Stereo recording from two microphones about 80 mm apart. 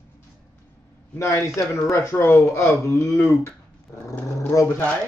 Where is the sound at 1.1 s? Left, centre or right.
Left.